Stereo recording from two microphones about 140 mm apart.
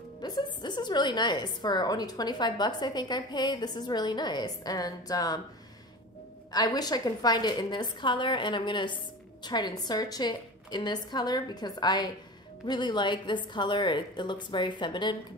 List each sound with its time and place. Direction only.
0.2 s a woman's voice: 30° left (ahead or behind)
6.5 s a woman's voice: 30° left (ahead or behind)